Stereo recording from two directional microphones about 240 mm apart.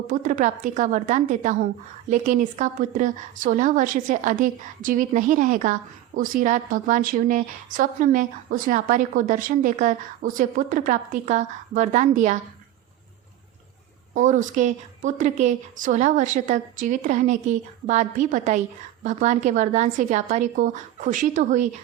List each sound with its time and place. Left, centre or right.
0.1 s a woman's voice: right
14.1 s a woman's voice: right